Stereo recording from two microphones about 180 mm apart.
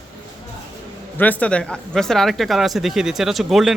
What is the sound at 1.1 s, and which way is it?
Speech, 10° left (ahead or behind).